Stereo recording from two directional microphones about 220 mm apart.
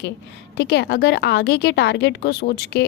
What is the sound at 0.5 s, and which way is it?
A woman's voice, 50° left (ahead or behind).